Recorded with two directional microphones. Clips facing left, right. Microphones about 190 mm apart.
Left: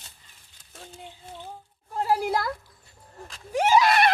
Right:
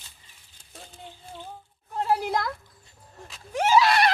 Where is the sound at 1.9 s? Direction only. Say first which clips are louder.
Left 1 dB; 10° left (ahead or behind).